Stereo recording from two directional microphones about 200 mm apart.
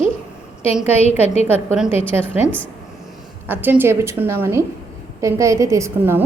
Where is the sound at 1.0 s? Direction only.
30° left (ahead or behind).